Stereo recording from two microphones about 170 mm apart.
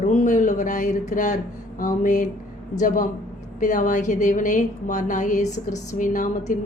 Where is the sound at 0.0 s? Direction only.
45° left (ahead or behind).